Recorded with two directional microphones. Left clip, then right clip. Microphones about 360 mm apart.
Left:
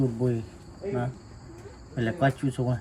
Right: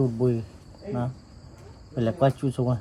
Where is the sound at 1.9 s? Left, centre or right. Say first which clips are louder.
Right 3 dB; centre.